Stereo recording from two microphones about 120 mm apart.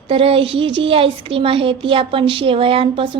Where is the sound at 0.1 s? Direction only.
50° right (ahead or behind).